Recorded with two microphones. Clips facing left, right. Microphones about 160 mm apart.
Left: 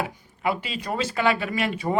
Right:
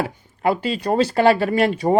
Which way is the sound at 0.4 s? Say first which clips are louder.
Right 7 dB; 40° right (ahead or behind).